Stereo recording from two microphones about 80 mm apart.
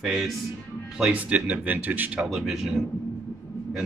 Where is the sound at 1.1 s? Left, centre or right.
Centre.